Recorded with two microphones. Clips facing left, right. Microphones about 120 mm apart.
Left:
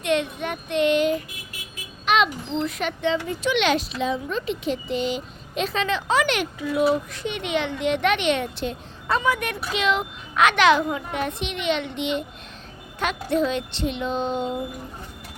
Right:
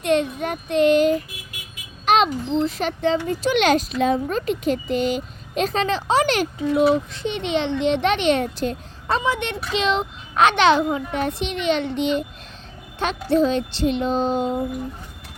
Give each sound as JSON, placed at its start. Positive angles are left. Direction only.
{"t": 0.0, "sound": "a child's voice", "side_deg": -40}
{"t": 9.0, "sound": "a child's voice", "side_deg": -30}